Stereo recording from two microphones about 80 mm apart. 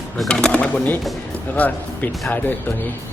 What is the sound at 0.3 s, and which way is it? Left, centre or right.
Speech, centre.